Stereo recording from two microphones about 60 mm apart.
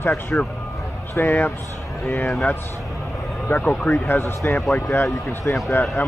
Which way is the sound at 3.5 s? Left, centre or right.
Left.